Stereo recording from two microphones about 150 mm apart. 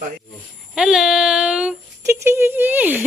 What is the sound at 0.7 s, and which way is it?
Child singing, 5° right (ahead or behind).